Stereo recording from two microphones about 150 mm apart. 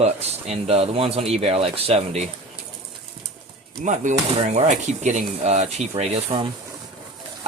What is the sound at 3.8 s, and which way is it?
Speech, 50° right (ahead or behind).